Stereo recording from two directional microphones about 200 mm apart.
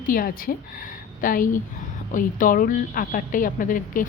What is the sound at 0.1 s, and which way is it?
A woman's voice, 45° left (ahead or behind).